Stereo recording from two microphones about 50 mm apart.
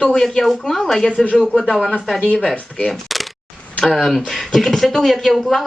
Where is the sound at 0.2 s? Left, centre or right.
Centre.